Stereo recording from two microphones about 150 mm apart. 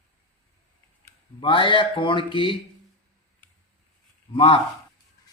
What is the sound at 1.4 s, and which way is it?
Speech, 35° left (ahead or behind).